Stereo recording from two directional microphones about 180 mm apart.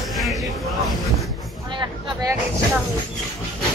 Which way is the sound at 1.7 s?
25° right (ahead or behind).